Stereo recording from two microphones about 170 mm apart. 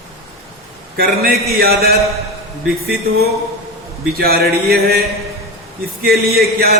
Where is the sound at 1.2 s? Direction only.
65° right (ahead or behind).